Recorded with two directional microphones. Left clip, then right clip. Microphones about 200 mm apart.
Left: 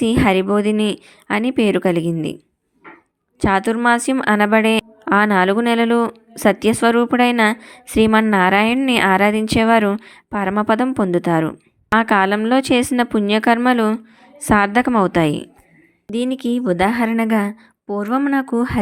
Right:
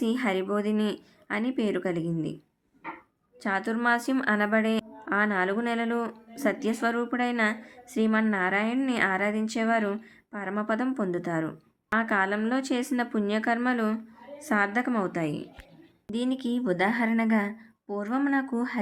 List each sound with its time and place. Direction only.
0.0 s a woman's voice: 40° left (ahead or behind)
3.4 s a woman's voice: 40° left (ahead or behind)
16.1 s a woman's voice: 35° left (ahead or behind)